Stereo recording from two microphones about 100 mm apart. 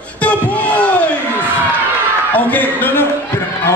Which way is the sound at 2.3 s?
15° left (ahead or behind).